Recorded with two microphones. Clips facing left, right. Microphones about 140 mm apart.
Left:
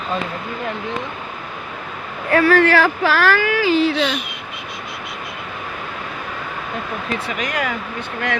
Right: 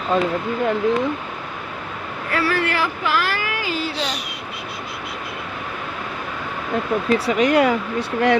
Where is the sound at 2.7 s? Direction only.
80° left.